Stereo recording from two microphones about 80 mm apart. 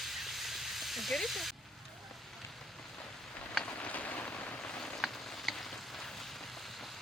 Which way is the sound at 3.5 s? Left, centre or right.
Centre.